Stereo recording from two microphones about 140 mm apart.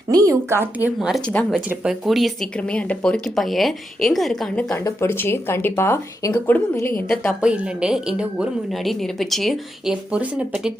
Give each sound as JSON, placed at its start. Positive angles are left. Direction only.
{"t": 0.1, "sound": "speech", "side_deg": -20}
{"t": 0.9, "sound": "a woman's voice", "side_deg": 0}
{"t": 4.8, "sound": "speech", "side_deg": 20}
{"t": 7.4, "sound": "a woman's voice", "side_deg": -5}